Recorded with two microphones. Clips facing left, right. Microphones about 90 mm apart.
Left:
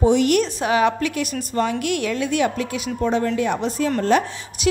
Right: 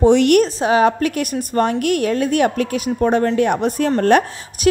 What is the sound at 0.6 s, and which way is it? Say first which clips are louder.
A woman's voice: right 4 dB; 35° right (ahead or behind).